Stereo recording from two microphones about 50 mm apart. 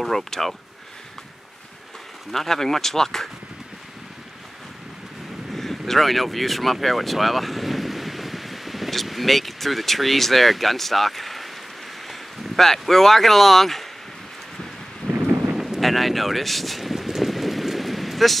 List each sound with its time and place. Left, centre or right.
0.0 s speech: centre
2.3 s speech: centre
5.5 s speech: centre
15.0 s thunder: centre
15.6 s boat: centre